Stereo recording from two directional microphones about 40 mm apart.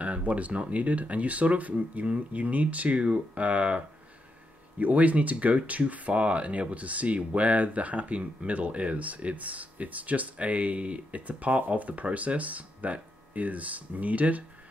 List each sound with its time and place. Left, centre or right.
0.0 s speech: right